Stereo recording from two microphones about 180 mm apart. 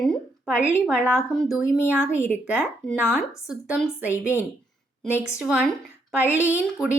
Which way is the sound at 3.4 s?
5° right (ahead or behind).